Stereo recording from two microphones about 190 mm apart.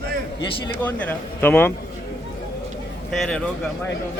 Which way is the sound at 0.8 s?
10° left (ahead or behind).